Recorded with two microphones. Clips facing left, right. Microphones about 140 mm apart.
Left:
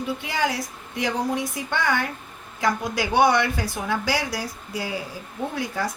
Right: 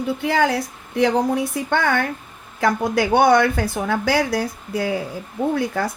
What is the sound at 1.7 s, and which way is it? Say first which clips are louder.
Speech: right 4 dB; 55° right (ahead or behind).